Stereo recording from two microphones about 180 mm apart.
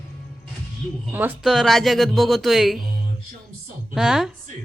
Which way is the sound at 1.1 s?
10° right (ahead or behind).